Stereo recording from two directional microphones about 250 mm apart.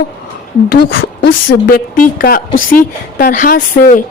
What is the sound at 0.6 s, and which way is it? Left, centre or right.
A woman's voice, left.